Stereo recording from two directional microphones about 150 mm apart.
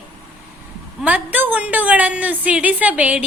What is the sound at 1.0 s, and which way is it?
A woman's voice, 10° right (ahead or behind).